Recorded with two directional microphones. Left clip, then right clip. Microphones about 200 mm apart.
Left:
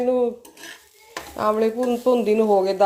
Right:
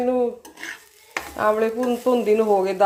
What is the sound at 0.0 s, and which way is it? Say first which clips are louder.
Speech: left 1 dB; 5° left (ahead or behind).